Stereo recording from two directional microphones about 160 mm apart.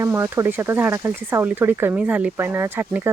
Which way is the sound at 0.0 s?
15° right (ahead or behind).